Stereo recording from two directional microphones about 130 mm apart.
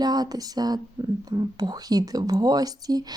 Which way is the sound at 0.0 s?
30° right (ahead or behind).